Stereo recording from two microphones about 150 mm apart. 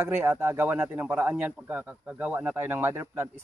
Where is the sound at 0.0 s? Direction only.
15° right (ahead or behind).